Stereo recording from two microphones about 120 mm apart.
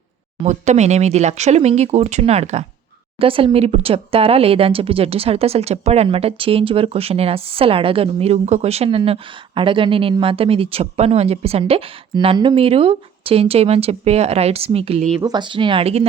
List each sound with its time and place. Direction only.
0.4 s speech: 75° right (ahead or behind)
3.2 s speech: 50° right (ahead or behind)
12.1 s speech: 45° right (ahead or behind)
15.2 s speech: 40° right (ahead or behind); by 16.0 s 55° right (ahead or behind)